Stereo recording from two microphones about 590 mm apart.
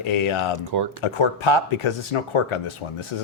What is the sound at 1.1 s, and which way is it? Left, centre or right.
A man's voice, left.